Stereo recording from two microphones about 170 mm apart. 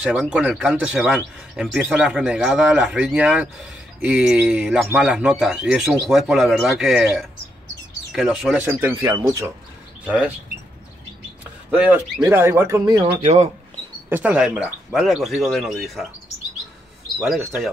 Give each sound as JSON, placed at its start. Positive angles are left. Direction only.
{"t": 0.0, "sound": "speech", "side_deg": -5}
{"t": 10.0, "sound": "speech", "side_deg": -5}
{"t": 11.7, "sound": "speech", "side_deg": -10}
{"t": 13.0, "sound": "speech", "side_deg": -40}
{"t": 14.0, "sound": "speech", "side_deg": -10}
{"t": 17.2, "sound": "speech", "side_deg": 0}